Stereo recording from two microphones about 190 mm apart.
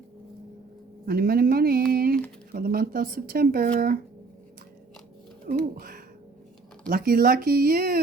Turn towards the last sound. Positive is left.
turn(degrees=-50)  # may be behind; listen again after turning